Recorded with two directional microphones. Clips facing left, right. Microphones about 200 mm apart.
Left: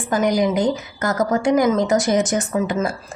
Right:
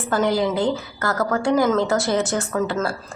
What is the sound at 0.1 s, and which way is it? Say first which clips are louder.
A woman's voice: left 2 dB; 15° left (ahead or behind).